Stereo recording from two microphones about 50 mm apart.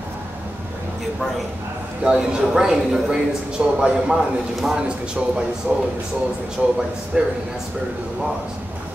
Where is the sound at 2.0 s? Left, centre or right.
Centre.